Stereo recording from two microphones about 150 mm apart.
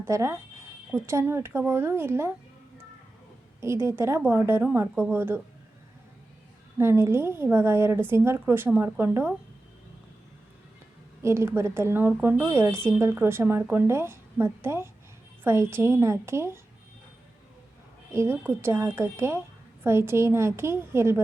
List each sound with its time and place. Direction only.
0.0 s a woman's voice: 20° right (ahead or behind)
3.6 s a woman's voice: 20° right (ahead or behind)
6.7 s a woman's voice: 15° right (ahead or behind)
11.2 s a woman's voice: 20° right (ahead or behind)
18.1 s a woman's voice: 15° right (ahead or behind)